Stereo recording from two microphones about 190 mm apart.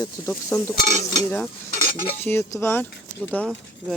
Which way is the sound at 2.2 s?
10° left (ahead or behind).